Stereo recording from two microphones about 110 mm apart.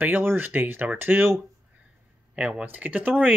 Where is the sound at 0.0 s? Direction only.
15° right (ahead or behind).